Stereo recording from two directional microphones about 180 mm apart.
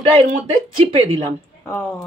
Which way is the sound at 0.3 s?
35° right (ahead or behind).